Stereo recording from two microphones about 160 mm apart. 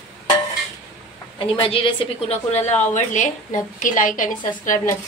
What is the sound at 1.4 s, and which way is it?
A woman's voice, 35° left (ahead or behind).